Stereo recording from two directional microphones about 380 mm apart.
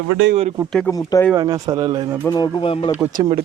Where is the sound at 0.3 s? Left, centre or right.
Centre.